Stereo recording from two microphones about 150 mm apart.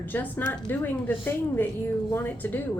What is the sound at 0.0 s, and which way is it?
A woman's voice, 15° left (ahead or behind).